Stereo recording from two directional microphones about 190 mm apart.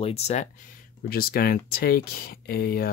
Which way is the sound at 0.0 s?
35° left (ahead or behind).